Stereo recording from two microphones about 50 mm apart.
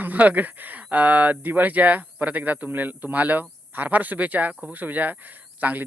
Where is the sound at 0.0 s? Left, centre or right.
Right.